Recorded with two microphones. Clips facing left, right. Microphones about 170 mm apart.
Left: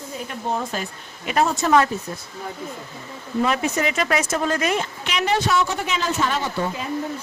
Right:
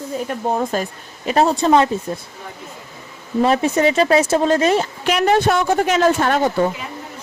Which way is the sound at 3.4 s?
30° right (ahead or behind).